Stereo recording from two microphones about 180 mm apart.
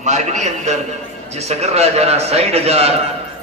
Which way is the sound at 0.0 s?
40° right (ahead or behind).